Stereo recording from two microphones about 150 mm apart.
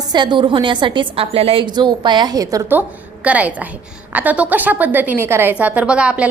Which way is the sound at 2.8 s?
10° right (ahead or behind).